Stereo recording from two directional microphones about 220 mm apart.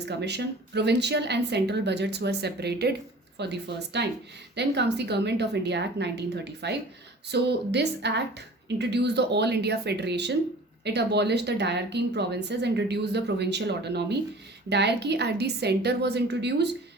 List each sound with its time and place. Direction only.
0.0 s a woman's voice: 50° right (ahead or behind)